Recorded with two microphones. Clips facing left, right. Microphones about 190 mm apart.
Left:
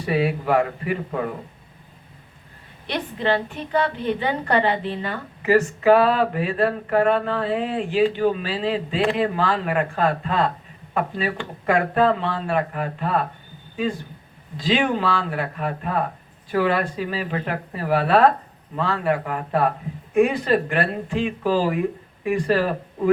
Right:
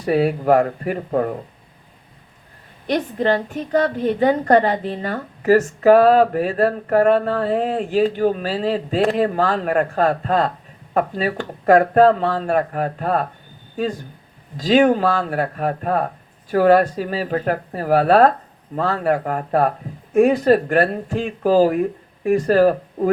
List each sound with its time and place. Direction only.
0.0 s a woman's voice: 45° right (ahead or behind)
2.8 s a woman's voice: 45° right (ahead or behind)
14.5 s a woman's voice: 45° right (ahead or behind)